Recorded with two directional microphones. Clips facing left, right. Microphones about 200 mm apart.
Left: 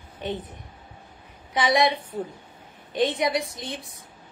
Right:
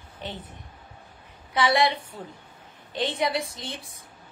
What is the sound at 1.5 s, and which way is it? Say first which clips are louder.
A woman's voice: left 1 dB; 15° left (ahead or behind).